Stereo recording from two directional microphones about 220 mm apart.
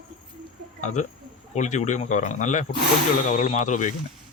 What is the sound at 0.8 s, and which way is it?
Speech, 35° left (ahead or behind).